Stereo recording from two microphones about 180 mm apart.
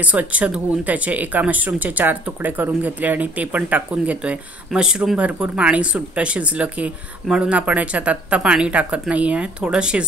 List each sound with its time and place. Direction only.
0.0 s speech: 10° right (ahead or behind)